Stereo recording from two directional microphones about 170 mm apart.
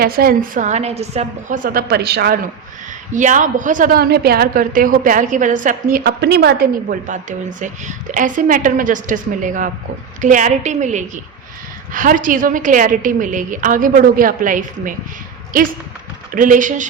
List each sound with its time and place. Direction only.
0.0 s a woman's voice: 60° right (ahead or behind)
3.1 s a woman's voice: 45° right (ahead or behind)
16.3 s a woman's voice: 50° right (ahead or behind)